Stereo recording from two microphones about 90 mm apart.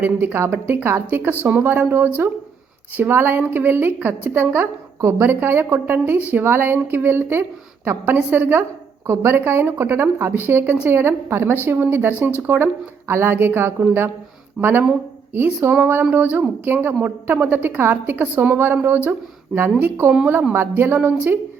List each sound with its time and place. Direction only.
0.0 s a woman's voice: 20° right (ahead or behind)
20.1 s a woman's voice: 15° right (ahead or behind)
20.5 s a woman's voice: 25° right (ahead or behind)